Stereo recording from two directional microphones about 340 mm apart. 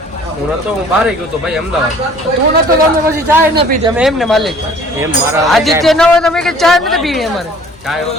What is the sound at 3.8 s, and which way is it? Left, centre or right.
Speech, centre.